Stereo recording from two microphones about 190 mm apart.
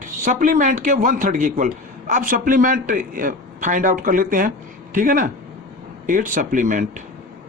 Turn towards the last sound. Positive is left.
turn(degrees=-45)  # may be behind; listen again after turning